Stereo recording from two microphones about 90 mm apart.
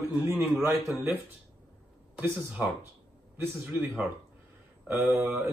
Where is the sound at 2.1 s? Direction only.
15° right (ahead or behind).